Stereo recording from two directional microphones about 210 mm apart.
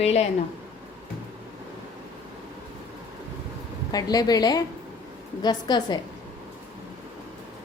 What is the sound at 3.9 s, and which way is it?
A woman's voice, 20° left (ahead or behind).